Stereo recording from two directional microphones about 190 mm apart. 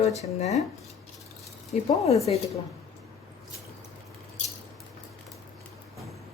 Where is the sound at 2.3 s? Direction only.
30° left (ahead or behind).